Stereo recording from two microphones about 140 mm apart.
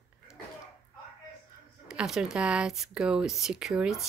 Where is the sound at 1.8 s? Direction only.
5° right (ahead or behind).